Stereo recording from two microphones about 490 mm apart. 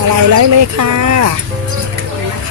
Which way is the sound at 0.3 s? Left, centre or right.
Right.